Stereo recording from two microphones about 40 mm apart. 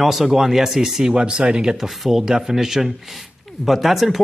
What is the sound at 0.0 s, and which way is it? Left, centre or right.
Speech, centre.